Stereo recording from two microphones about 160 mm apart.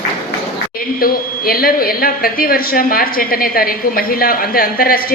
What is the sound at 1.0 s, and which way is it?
A woman's voice, 65° left (ahead or behind).